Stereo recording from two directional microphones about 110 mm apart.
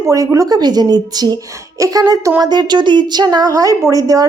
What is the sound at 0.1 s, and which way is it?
A woman's voice, 30° right (ahead or behind).